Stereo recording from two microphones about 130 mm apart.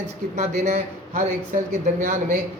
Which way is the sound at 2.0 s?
85° right.